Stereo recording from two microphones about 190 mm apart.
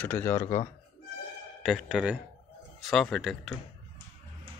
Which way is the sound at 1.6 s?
Centre (ahead or behind).